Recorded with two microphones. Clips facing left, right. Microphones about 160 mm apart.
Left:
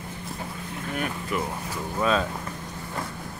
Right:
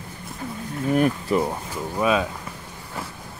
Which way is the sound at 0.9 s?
35° right (ahead or behind).